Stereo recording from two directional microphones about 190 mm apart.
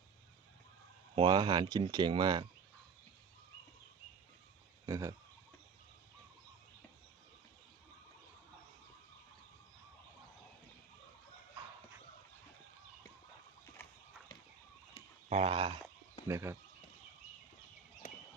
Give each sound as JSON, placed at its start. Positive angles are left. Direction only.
{"t": 1.1, "sound": "speech", "side_deg": -25}
{"t": 4.9, "sound": "speech", "side_deg": -15}
{"t": 15.3, "sound": "speech", "side_deg": -30}
{"t": 16.2, "sound": "speech", "side_deg": -15}